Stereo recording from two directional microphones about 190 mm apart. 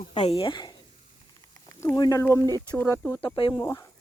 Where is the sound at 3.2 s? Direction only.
25° left (ahead or behind).